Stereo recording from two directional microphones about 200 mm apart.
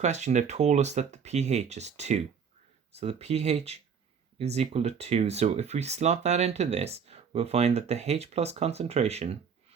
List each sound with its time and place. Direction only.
0.0 s speech: 35° right (ahead or behind)